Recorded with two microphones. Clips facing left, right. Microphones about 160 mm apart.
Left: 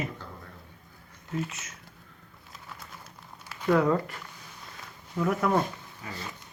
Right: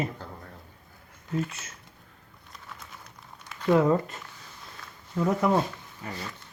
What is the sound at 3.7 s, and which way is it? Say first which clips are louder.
Speech: right 2 dB; 25° right (ahead or behind).